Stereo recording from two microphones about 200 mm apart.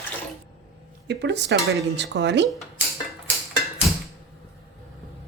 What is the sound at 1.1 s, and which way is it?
Speech, 60° right (ahead or behind).